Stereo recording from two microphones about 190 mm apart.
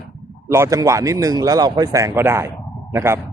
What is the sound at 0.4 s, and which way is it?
Speech, 15° right (ahead or behind).